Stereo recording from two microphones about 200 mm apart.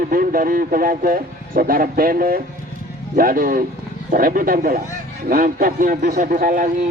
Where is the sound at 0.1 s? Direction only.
45° right (ahead or behind).